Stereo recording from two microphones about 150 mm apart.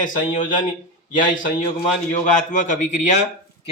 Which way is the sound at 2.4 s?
55° left (ahead or behind).